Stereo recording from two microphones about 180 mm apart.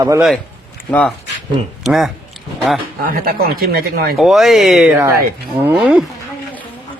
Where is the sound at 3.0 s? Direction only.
55° right (ahead or behind).